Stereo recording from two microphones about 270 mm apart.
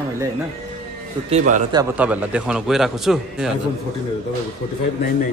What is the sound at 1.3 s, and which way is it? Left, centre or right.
Speech, centre.